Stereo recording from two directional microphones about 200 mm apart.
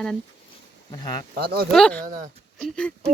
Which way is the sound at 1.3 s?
50° right (ahead or behind).